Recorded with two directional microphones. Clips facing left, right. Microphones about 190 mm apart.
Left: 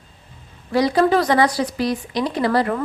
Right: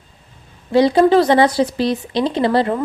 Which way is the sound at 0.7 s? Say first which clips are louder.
Right 5 dB; 25° right (ahead or behind).